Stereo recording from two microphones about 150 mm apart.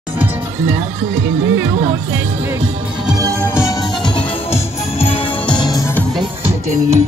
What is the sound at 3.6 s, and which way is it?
Music, 30° left (ahead or behind).